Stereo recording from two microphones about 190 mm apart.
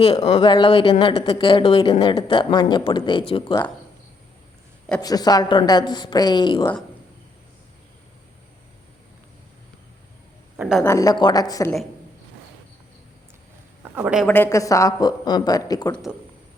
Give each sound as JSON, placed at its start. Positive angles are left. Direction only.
{"t": 0.0, "sound": "speech", "side_deg": 20}
{"t": 4.9, "sound": "speech", "side_deg": 20}
{"t": 10.6, "sound": "speech", "side_deg": -5}
{"t": 10.8, "sound": "speech", "side_deg": 15}
{"t": 13.9, "sound": "speech", "side_deg": -5}
{"t": 14.3, "sound": "speech", "side_deg": 10}